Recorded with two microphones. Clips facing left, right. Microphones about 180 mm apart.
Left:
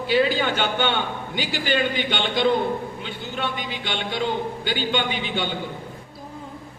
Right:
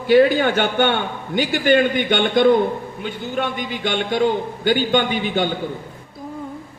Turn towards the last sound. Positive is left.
turn(degrees=-45)  # may be behind; listen again after turning